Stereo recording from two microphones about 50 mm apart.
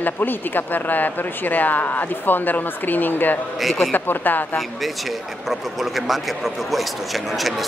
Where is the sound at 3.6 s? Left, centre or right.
Centre.